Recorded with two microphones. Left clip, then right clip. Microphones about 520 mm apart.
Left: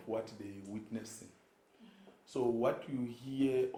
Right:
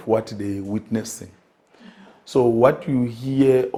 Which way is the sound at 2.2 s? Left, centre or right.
Right.